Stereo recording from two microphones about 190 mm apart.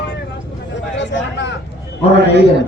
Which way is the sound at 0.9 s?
70° left (ahead or behind).